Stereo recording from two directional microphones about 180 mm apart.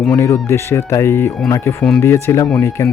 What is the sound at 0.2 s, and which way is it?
Speech, 15° left (ahead or behind).